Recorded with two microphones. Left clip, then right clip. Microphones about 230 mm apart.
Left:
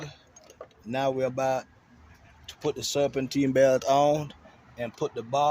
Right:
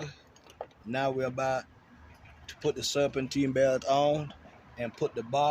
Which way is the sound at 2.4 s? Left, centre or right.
Centre.